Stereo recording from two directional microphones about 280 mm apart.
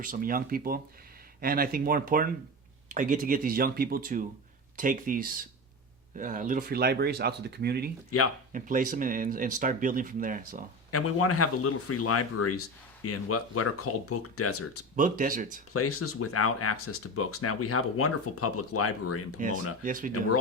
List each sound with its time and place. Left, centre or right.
0.0 s speech: right
10.9 s speech: left
14.9 s speech: right
15.7 s speech: left
19.8 s speech: right